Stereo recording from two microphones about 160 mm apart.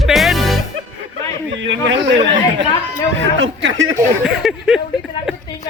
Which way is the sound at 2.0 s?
90° right.